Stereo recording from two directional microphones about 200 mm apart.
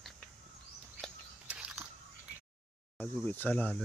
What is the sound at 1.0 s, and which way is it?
Biting, 5° right (ahead or behind).